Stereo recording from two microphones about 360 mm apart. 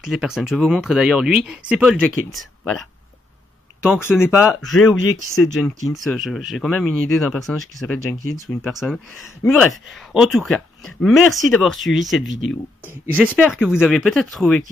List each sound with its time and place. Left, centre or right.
0.0 s speech: centre
3.8 s speech: centre
5.0 s speech: left
5.9 s speech: centre
12.3 s speech: left
12.8 s speech: centre